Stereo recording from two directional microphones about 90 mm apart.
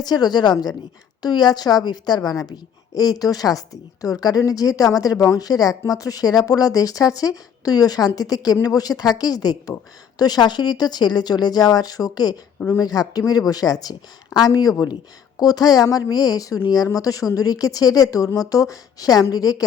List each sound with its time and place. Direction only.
0.0 s a woman's voice: 50° left (ahead or behind)